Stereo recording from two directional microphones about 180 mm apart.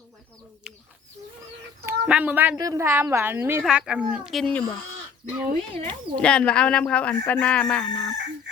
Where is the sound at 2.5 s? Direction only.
20° right (ahead or behind); by 4.6 s centre (ahead or behind).